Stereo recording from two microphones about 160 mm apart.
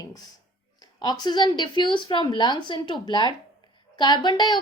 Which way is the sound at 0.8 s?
25° left (ahead or behind).